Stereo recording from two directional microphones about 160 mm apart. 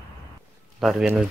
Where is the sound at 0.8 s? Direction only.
Centre (ahead or behind).